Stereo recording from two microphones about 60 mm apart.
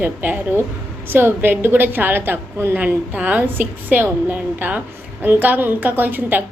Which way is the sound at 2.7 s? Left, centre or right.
Right.